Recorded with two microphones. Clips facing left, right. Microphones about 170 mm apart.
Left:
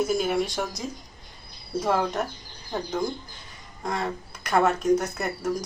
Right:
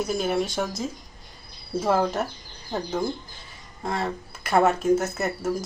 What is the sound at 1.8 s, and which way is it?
Speech, 5° right (ahead or behind).